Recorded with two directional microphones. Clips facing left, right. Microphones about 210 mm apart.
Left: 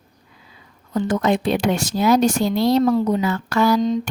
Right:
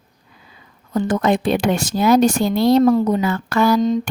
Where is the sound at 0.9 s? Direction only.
50° right (ahead or behind).